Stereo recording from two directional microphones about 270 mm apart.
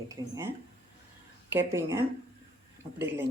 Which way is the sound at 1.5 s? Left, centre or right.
Centre.